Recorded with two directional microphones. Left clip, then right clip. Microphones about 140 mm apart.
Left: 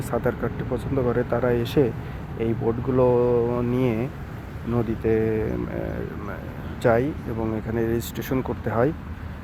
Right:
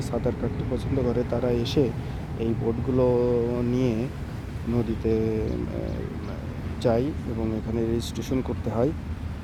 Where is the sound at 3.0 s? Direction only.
20° left (ahead or behind).